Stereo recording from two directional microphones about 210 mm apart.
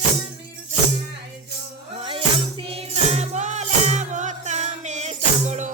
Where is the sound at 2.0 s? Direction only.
25° right (ahead or behind).